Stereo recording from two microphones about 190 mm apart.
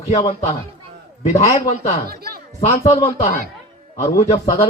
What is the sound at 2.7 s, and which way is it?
Speech, 35° left (ahead or behind).